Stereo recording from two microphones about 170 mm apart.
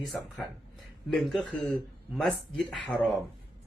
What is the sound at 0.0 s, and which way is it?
Speech, centre (ahead or behind).